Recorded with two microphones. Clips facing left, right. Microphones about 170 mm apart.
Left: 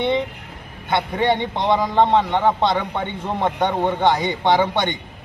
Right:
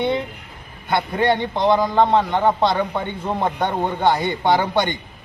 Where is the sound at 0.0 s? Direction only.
5° right (ahead or behind).